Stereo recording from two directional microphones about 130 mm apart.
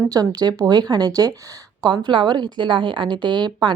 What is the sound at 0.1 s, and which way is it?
Speech, 30° right (ahead or behind).